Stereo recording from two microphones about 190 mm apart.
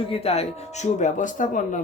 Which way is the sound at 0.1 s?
30° left (ahead or behind).